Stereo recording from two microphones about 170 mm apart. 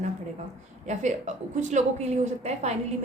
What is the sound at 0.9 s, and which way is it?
A woman's voice, 45° right (ahead or behind).